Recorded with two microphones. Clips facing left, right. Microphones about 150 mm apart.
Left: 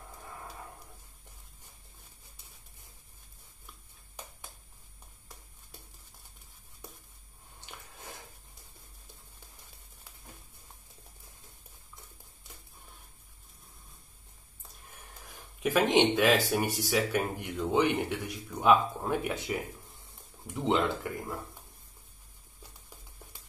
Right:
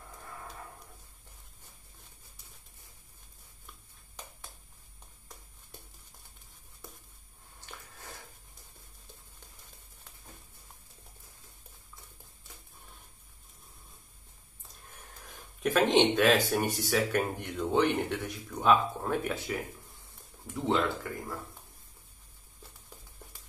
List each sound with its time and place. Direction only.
15.6 s speech: 10° left (ahead or behind)
20.5 s speech: 15° left (ahead or behind)